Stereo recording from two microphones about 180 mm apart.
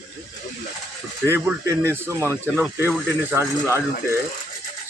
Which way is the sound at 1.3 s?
15° right (ahead or behind).